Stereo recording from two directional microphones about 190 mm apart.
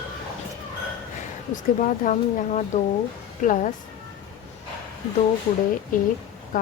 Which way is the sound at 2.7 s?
35° left (ahead or behind).